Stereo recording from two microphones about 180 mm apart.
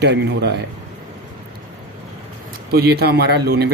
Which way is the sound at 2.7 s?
60° right (ahead or behind).